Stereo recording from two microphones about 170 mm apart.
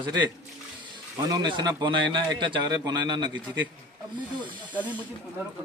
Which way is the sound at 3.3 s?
90° right.